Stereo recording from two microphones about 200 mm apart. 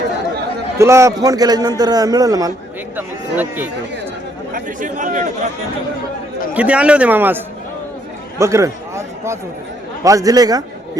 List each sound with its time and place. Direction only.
0.8 s a man's voice: 15° right (ahead or behind)
2.9 s a sound: 10° right (ahead or behind)
4.5 s speech: 40° right (ahead or behind)
6.5 s a man's voice: 5° right (ahead or behind)